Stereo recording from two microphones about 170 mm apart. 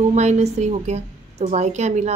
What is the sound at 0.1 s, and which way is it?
A woman's voice, 40° right (ahead or behind).